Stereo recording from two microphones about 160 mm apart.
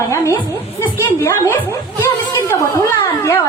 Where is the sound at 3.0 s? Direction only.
15° left (ahead or behind).